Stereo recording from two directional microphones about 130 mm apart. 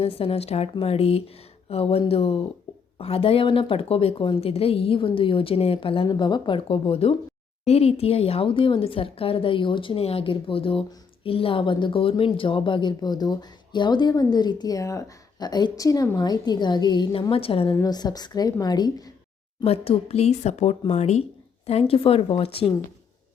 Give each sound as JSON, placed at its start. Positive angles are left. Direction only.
{"t": 0.0, "sound": "a woman's voice", "side_deg": 45}
{"t": 17.8, "sound": "a woman's voice", "side_deg": 30}
{"t": 19.6, "sound": "speech", "side_deg": 50}